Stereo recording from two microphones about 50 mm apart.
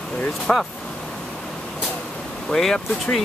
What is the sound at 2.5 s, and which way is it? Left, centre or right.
Speech, centre.